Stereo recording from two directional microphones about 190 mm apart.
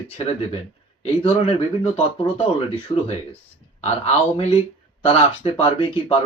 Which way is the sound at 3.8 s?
35° left (ahead or behind).